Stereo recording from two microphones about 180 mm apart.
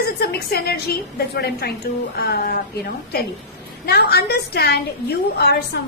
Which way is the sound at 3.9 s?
60° left (ahead or behind).